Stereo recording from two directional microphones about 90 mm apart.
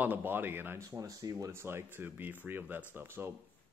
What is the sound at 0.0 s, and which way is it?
Speech, 20° right (ahead or behind).